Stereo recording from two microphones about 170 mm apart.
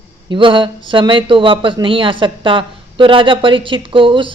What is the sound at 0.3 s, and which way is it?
Speech, 30° right (ahead or behind).